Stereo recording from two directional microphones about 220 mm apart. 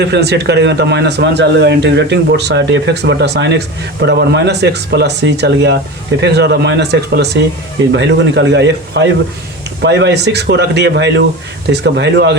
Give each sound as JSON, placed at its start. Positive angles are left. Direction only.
{"t": 0.0, "sound": "speech", "side_deg": -50}